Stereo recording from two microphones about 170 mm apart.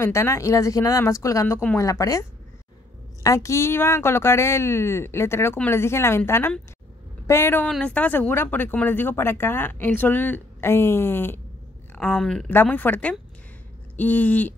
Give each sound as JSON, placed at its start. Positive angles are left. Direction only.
{"t": 0.0, "sound": "speech", "side_deg": 15}
{"t": 3.3, "sound": "speech", "side_deg": 15}